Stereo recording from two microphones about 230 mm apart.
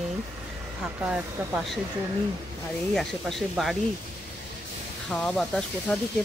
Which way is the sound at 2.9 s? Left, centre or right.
Centre.